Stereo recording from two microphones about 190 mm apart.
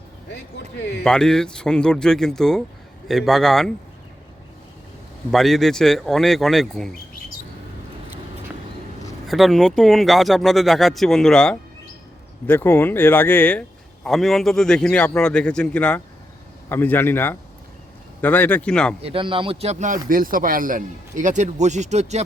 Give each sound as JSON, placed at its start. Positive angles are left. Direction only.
{"t": 1.0, "sound": "speech", "side_deg": 5}
{"t": 5.3, "sound": "speech", "side_deg": 0}
{"t": 9.2, "sound": "speech", "side_deg": 0}
{"t": 19.0, "sound": "a man's voice", "side_deg": -25}